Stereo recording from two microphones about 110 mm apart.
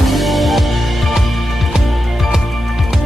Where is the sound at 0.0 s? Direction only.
Centre (ahead or behind).